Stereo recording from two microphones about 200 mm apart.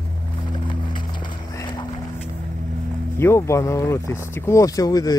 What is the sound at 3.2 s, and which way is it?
Speech, 15° left (ahead or behind).